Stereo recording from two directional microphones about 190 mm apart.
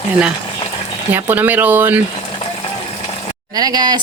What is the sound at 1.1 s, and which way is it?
Speech, 10° right (ahead or behind).